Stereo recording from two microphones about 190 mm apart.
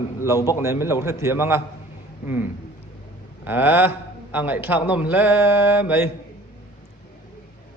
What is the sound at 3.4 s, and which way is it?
A man's voice, 10° right (ahead or behind).